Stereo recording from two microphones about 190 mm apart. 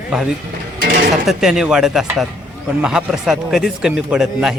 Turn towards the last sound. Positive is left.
turn(degrees=-5)  # may be behind; listen again after turning